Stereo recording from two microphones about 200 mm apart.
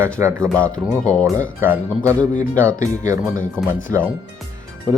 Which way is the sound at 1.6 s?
10° right (ahead or behind).